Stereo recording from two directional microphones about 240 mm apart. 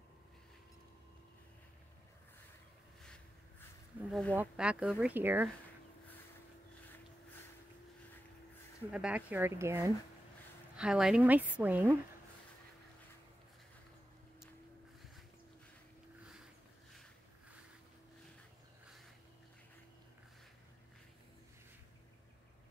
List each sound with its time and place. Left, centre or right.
4.1 s a woman's voice: centre
8.9 s a woman's voice: centre